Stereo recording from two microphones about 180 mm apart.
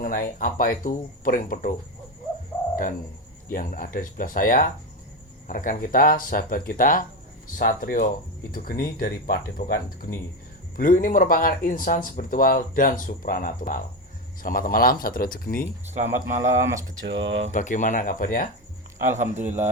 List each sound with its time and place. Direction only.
0.0 s speech: 50° left (ahead or behind)
3.5 s speech: 50° left (ahead or behind)
16.5 s speech: 45° right (ahead or behind)
17.1 s speech: 90° right
17.5 s speech: 45° left (ahead or behind)
19.0 s speech: 40° right (ahead or behind)